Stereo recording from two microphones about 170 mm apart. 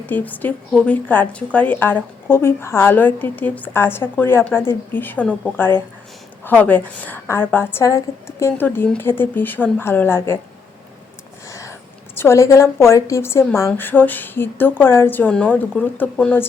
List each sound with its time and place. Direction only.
0.1 s a woman's voice: 10° left (ahead or behind)
11.4 s a sound: 15° left (ahead or behind)
12.1 s a woman's voice: 15° left (ahead or behind)